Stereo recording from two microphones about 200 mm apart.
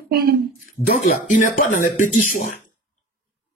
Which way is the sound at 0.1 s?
50° right (ahead or behind).